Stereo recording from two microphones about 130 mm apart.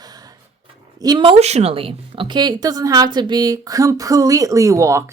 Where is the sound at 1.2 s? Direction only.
50° right (ahead or behind).